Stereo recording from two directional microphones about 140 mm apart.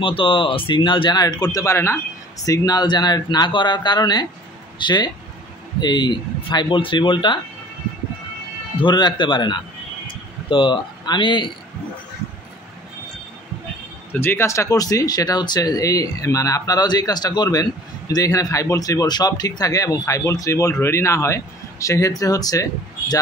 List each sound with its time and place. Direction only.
0.0 s speech: 40° left (ahead or behind)
8.7 s speech: 35° left (ahead or behind)
14.2 s speech: 20° left (ahead or behind)